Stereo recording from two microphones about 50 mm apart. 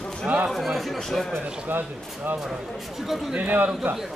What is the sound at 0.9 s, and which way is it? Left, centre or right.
Speech, centre.